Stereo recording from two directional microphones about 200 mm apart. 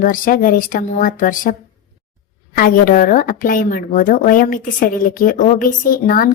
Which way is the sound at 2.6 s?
45° left (ahead or behind).